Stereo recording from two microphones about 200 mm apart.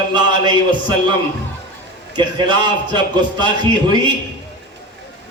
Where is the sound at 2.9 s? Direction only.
20° right (ahead or behind).